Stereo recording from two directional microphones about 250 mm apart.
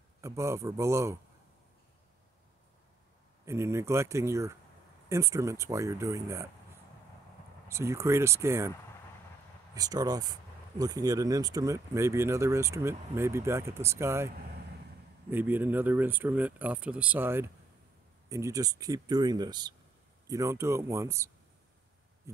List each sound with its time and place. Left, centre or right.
0.2 s speech: centre
3.4 s speech: centre
7.6 s speech: centre
9.8 s speech: centre